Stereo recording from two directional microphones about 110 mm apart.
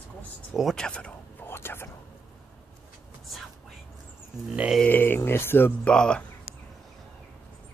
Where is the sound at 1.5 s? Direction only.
20° left (ahead or behind).